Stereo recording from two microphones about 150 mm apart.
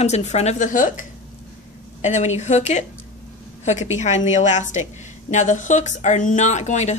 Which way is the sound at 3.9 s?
50° left (ahead or behind).